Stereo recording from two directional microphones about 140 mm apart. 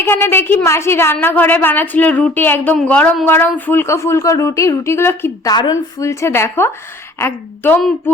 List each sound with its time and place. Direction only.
0.0 s a woman's voice: 15° left (ahead or behind)